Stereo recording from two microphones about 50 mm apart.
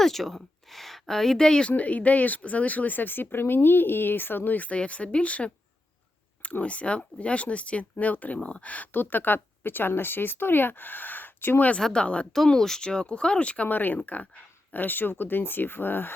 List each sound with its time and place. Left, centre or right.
0.0 s speech: centre
1.7 s speech: left
8.4 s speech: left
11.8 s speech: centre
12.0 s speech: left
12.5 s speech: centre
13.7 s speech: left